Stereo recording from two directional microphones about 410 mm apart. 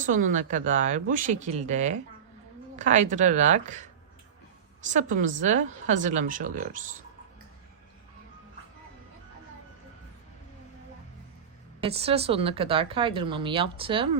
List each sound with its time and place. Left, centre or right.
0.0 s speech: centre
4.9 s speech: centre
11.8 s speech: centre